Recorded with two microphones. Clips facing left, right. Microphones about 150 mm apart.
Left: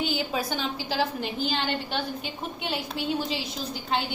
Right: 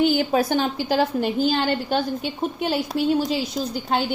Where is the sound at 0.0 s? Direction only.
50° right (ahead or behind).